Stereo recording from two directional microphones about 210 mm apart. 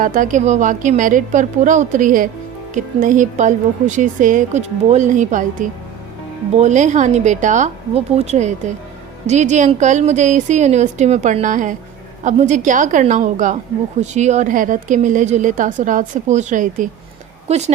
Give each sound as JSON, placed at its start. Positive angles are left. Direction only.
{"t": 0.0, "sound": "a woman's voice", "side_deg": -40}